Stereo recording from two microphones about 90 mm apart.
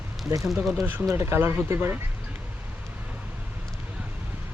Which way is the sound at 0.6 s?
Centre (ahead or behind).